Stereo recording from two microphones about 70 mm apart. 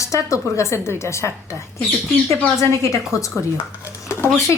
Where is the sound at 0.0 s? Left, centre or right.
Left.